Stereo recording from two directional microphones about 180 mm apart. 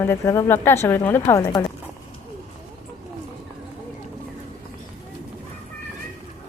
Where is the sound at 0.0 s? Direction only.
15° left (ahead or behind).